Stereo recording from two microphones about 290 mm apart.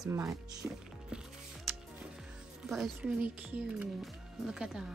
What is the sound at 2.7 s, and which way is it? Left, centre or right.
Speech, centre.